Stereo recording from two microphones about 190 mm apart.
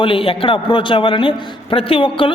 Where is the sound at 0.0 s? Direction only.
30° left (ahead or behind).